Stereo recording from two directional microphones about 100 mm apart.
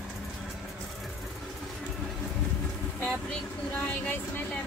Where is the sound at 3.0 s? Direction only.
10° left (ahead or behind).